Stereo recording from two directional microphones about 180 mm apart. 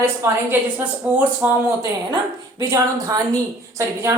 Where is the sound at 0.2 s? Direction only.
15° right (ahead or behind).